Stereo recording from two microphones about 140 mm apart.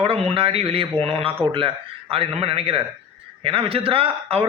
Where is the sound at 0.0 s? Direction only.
45° right (ahead or behind).